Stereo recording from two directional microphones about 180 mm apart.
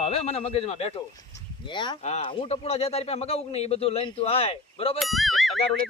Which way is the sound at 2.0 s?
35° left (ahead or behind).